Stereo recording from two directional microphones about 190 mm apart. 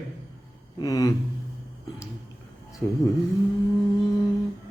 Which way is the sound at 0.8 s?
20° left (ahead or behind).